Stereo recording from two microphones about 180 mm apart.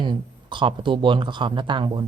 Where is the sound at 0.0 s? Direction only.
25° right (ahead or behind).